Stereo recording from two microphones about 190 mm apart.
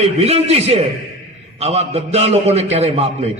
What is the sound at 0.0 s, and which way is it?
A man's voice, 35° right (ahead or behind).